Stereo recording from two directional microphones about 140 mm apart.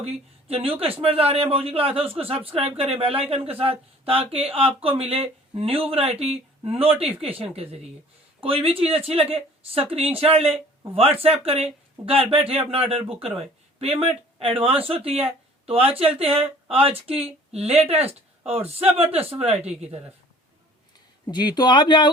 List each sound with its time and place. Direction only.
0.0 s speech: 45° right (ahead or behind)
21.2 s speech: 30° left (ahead or behind)